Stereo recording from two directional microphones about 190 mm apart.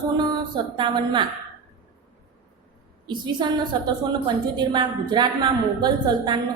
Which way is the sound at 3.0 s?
25° right (ahead or behind).